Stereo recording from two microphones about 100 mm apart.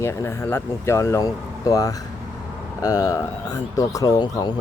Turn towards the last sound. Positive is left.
turn(degrees=45)  # may be behind; listen again after turning